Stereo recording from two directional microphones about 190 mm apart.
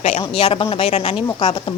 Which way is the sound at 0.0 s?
30° left (ahead or behind).